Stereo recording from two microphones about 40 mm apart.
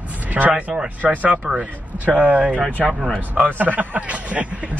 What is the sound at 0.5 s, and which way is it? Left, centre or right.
Speech, right.